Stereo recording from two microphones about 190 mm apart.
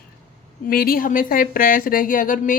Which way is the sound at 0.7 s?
50° left (ahead or behind).